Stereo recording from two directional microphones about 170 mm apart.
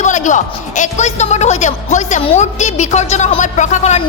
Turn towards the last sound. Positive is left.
turn(degrees=45)  # may be behind; listen again after turning